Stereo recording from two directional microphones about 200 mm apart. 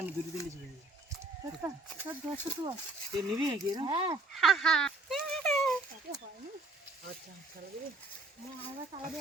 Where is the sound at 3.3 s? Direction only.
20° right (ahead or behind).